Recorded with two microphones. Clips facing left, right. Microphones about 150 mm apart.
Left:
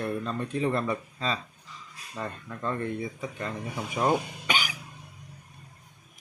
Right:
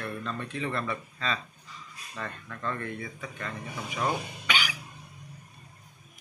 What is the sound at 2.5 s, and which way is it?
Speech, 20° left (ahead or behind).